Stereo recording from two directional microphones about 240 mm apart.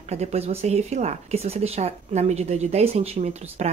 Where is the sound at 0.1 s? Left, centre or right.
Right.